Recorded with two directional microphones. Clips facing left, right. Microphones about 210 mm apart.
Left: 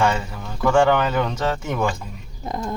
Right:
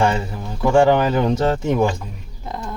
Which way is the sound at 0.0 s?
30° right (ahead or behind).